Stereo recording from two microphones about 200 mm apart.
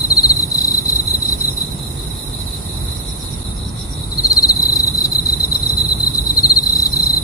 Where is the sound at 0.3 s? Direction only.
15° left (ahead or behind).